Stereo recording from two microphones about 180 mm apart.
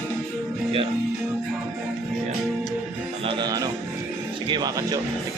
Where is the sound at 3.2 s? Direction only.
20° right (ahead or behind).